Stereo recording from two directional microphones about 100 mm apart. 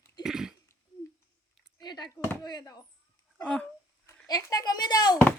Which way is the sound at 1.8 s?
45° left (ahead or behind).